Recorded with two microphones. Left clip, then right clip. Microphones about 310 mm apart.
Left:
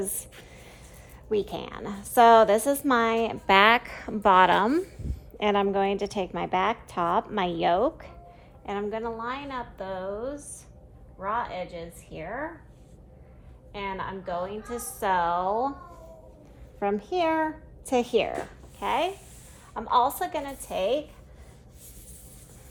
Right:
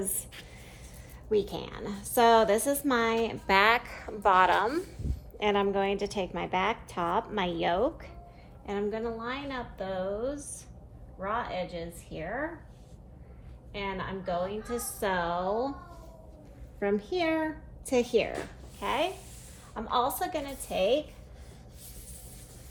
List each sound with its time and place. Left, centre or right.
0.0 s a woman's voice: left
1.3 s a woman's voice: left
13.7 s a woman's voice: centre
17.0 s a woman's voice: centre